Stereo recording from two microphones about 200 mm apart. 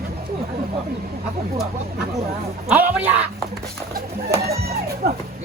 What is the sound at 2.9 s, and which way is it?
Speech, 10° right (ahead or behind).